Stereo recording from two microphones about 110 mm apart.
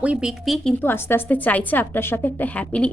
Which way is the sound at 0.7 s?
20° left (ahead or behind).